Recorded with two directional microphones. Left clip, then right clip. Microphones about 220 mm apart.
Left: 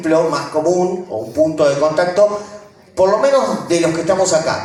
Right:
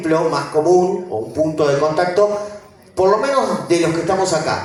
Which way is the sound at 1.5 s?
15° left (ahead or behind).